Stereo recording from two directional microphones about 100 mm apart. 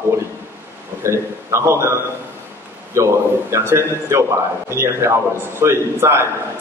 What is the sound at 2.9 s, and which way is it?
A man's voice, 30° right (ahead or behind).